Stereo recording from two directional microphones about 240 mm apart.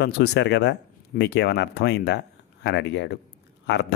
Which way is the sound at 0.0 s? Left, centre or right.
Left.